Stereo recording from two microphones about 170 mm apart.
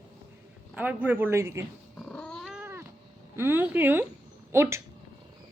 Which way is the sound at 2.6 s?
15° right (ahead or behind).